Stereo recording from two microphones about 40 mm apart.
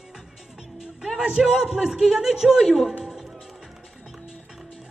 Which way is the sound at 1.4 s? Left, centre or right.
Centre.